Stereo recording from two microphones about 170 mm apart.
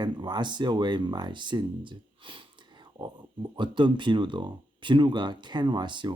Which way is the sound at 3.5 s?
30° right (ahead or behind).